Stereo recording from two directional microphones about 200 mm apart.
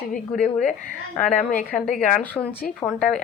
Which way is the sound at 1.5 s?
5° left (ahead or behind).